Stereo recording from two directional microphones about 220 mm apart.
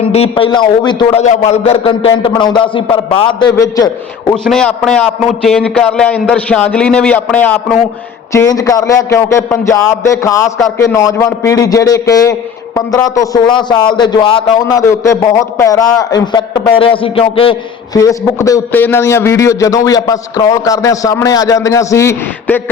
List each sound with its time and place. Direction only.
0.0 s a man's voice: 25° left (ahead or behind)
1.2 s a man's voice: 30° left (ahead or behind)
4.4 s a man's voice: 5° left (ahead or behind)